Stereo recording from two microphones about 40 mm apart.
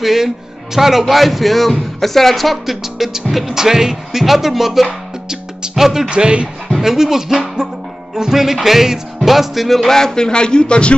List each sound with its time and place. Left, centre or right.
0.0 s speech: centre
5.3 s music: centre
6.0 s speech: right
6.8 s speech: centre
9.9 s speech: centre